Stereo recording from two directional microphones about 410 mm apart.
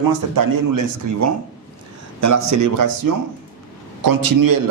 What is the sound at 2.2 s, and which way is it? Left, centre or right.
Speech, right.